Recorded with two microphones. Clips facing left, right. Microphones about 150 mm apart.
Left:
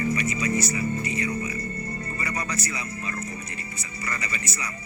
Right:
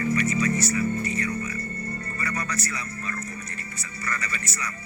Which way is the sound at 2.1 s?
20° left (ahead or behind).